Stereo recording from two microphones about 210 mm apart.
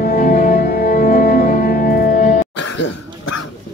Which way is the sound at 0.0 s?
45° left (ahead or behind).